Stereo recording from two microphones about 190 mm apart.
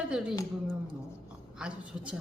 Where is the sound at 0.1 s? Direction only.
5° right (ahead or behind).